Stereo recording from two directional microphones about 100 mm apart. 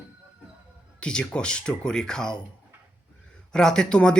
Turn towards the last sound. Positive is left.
turn(degrees=10)  # may be behind; listen again after turning